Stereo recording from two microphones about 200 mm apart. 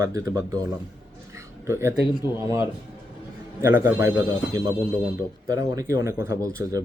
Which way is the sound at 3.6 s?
15° right (ahead or behind).